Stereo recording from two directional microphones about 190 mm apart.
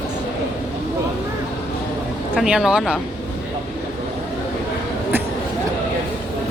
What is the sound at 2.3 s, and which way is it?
Speech, centre (ahead or behind).